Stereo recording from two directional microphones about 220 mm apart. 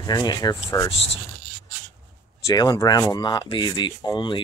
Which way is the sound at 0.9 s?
55° left (ahead or behind).